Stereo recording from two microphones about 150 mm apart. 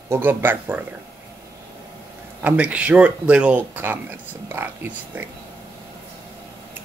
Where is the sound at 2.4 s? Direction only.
10° right (ahead or behind).